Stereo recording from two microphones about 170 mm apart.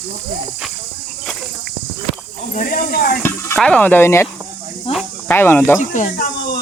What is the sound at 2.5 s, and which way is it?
Speech, 60° left (ahead or behind).